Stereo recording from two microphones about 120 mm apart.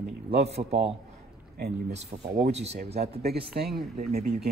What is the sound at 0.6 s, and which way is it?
Speech, 60° right (ahead or behind).